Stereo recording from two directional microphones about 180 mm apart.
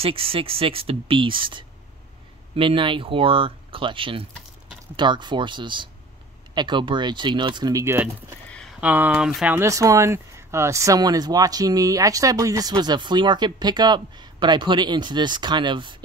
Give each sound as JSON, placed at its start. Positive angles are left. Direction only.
{"t": 0.0, "sound": "speech", "side_deg": -30}